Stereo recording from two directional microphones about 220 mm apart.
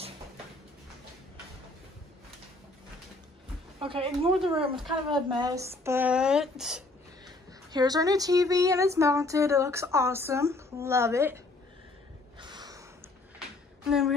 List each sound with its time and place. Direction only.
3.8 s speech: 25° right (ahead or behind)
5.1 s a sound: 20° right (ahead or behind)
5.9 s speech: 10° right (ahead or behind)
7.7 s a sound: 15° right (ahead or behind)
12.4 s gasp: 20° right (ahead or behind)
13.8 s speech: centre (ahead or behind)